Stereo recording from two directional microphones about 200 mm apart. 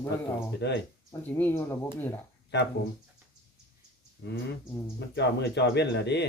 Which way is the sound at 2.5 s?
55° left (ahead or behind).